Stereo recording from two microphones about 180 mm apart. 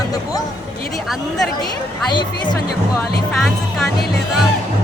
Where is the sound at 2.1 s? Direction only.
25° left (ahead or behind).